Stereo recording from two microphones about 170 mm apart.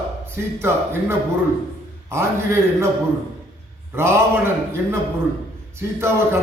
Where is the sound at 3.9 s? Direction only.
15° right (ahead or behind).